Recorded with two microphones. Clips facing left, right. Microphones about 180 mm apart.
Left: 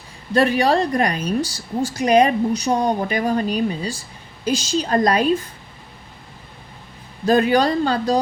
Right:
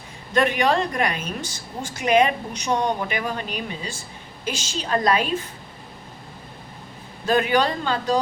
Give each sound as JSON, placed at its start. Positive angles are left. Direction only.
{"t": 0.3, "sound": "a woman's voice", "side_deg": 35}
{"t": 7.3, "sound": "a woman's voice", "side_deg": 40}